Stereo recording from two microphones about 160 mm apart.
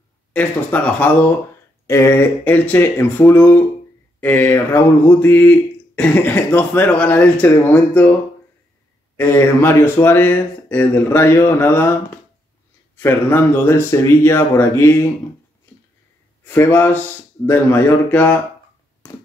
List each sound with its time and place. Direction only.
0.3 s speech: 10° left (ahead or behind)
9.1 s speech: 15° left (ahead or behind)
16.4 s speech: 15° left (ahead or behind)